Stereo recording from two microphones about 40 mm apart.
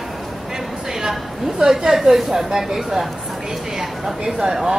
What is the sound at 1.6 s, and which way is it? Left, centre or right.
Speech, centre.